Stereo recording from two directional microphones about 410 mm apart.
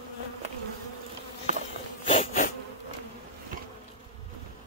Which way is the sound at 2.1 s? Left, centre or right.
Centre.